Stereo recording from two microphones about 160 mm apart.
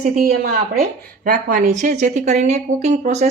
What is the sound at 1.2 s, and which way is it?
Speech, 55° right (ahead or behind).